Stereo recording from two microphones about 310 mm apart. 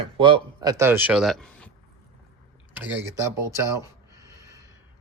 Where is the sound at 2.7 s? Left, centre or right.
Centre.